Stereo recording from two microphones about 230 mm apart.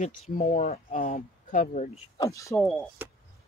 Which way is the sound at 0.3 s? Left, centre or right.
Left.